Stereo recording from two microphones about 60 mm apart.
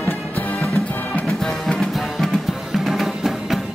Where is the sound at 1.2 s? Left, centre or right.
Centre.